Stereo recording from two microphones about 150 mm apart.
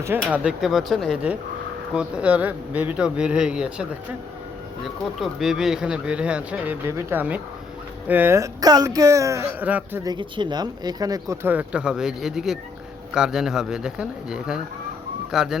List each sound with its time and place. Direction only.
0.3 s speech: 10° right (ahead or behind)
5.2 s speech: centre (ahead or behind)
10.0 s speech: 30° right (ahead or behind)
11.4 s speech: 10° right (ahead or behind)